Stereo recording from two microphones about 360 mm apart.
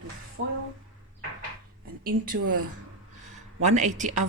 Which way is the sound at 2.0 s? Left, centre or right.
Right.